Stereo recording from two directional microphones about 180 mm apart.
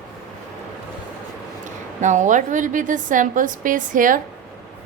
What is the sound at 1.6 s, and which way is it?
A woman's voice, 45° right (ahead or behind).